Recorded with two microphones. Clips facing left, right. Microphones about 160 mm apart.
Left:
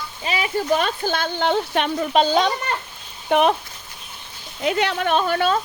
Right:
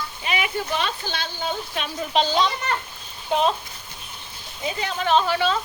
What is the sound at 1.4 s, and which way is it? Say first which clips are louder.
Speech: left 9 dB; 60° left (ahead or behind).